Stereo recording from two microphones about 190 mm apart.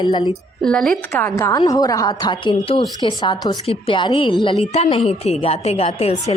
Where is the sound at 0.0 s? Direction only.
25° left (ahead or behind).